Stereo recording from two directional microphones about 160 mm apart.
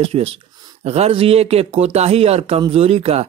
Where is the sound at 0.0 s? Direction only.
35° right (ahead or behind).